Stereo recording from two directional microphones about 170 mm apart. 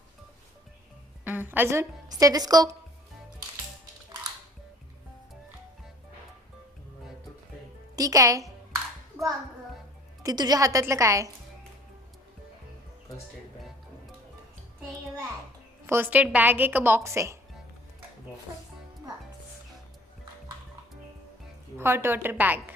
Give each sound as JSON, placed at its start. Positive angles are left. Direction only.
{"t": 1.2, "sound": "a woman's voice", "side_deg": -10}
{"t": 7.9, "sound": "a woman's voice", "side_deg": -20}
{"t": 10.2, "sound": "a woman's voice", "side_deg": -25}
{"t": 15.9, "sound": "a woman's voice", "side_deg": -10}
{"t": 21.8, "sound": "a woman's voice", "side_deg": -15}